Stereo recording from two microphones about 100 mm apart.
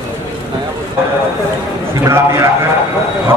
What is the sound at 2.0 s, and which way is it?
Speech, 30° right (ahead or behind).